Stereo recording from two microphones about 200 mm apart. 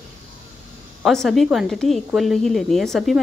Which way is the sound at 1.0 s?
Centre (ahead or behind).